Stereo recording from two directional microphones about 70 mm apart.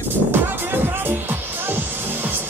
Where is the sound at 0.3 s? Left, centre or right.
Right.